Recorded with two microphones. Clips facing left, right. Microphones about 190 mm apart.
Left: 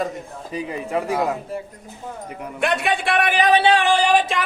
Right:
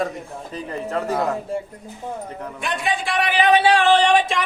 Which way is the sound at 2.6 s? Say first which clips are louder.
Left 4 dB; 70° left (ahead or behind).